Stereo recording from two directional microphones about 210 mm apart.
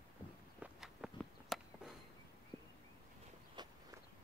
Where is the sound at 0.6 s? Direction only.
Centre (ahead or behind).